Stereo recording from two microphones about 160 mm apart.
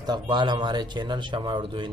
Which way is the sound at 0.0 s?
25° right (ahead or behind).